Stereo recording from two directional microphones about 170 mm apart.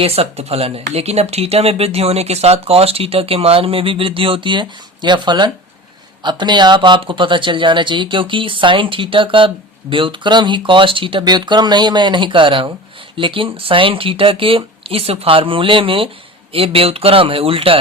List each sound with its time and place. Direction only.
0.0 s speech: 35° right (ahead or behind)